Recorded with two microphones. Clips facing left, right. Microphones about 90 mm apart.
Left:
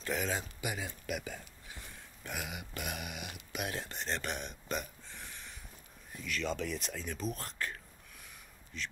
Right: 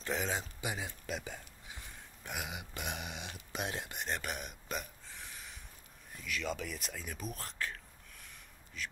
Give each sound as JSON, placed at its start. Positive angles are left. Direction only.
{"t": 0.0, "sound": "speech", "side_deg": -20}
{"t": 2.2, "sound": "a sound", "side_deg": -20}
{"t": 3.5, "sound": "speech", "side_deg": -20}